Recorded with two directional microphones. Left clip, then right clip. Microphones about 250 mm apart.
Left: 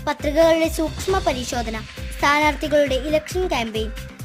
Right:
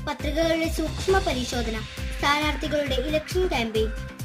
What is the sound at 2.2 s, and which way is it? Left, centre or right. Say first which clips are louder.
Music: left 6 dB; left.